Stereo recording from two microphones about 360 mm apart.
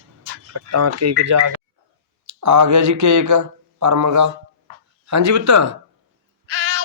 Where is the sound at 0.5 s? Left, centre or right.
Right.